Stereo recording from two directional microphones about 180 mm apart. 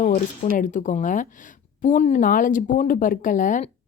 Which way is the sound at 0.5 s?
45° left (ahead or behind).